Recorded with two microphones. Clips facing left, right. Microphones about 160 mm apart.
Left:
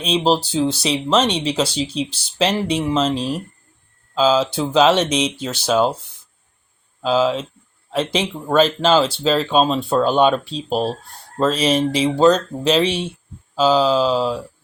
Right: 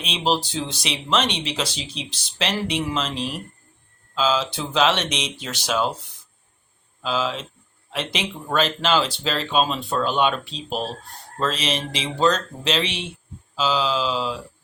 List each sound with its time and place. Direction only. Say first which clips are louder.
0.0 s speech: left 6 dB; 35° left (ahead or behind)
7.0 s speech: left 8 dB; 35° left (ahead or behind)